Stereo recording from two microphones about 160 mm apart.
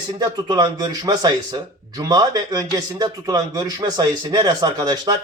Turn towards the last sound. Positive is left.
turn(degrees=-25)  # may be behind; listen again after turning